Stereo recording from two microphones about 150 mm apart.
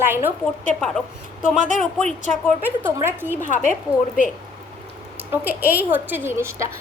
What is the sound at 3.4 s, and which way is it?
Speech, 60° left (ahead or behind).